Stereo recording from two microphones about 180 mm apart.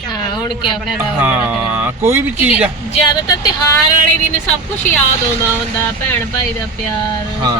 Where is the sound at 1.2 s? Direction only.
10° right (ahead or behind).